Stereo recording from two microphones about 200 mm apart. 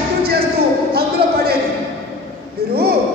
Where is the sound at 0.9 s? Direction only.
50° right (ahead or behind).